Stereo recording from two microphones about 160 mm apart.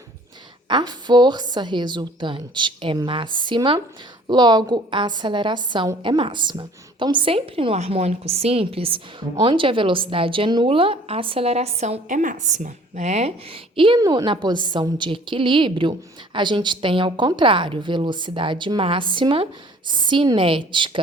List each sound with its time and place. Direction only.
0.7 s a woman's voice: 25° right (ahead or behind)